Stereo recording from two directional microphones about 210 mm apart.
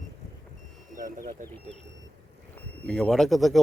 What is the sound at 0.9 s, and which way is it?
Speech, 40° right (ahead or behind).